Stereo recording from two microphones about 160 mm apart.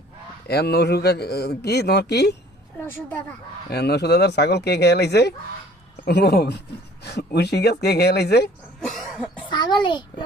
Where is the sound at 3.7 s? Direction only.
85° left.